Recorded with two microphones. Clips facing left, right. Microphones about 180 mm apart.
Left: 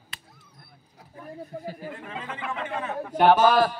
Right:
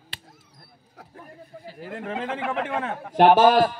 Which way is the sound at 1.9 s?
75° right (ahead or behind).